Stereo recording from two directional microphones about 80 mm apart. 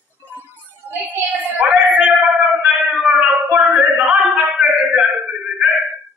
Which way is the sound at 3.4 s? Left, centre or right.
Right.